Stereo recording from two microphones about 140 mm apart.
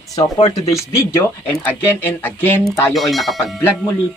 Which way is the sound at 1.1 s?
15° left (ahead or behind).